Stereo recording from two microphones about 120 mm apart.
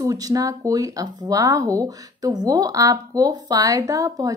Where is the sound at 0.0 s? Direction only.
30° right (ahead or behind).